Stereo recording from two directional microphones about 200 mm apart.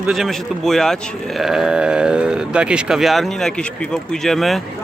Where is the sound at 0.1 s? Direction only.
Centre (ahead or behind).